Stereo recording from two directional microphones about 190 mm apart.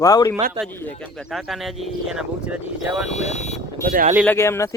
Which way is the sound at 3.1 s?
35° left (ahead or behind).